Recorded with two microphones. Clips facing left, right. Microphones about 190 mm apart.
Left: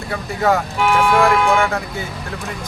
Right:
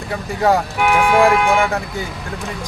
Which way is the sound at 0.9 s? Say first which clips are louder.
Right 2 dB; 15° right (ahead or behind).